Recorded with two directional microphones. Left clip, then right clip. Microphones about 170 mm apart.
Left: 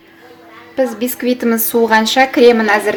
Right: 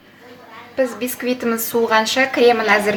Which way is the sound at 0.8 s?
40° left (ahead or behind).